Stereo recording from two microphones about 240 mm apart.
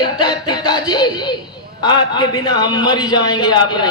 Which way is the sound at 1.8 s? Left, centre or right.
Centre.